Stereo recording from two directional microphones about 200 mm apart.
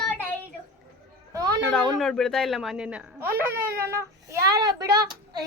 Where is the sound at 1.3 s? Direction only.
20° right (ahead or behind).